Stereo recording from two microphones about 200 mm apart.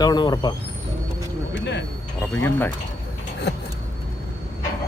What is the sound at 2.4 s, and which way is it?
Speech, 10° left (ahead or behind).